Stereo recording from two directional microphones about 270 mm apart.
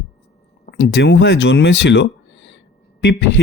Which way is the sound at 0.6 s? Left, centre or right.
Left.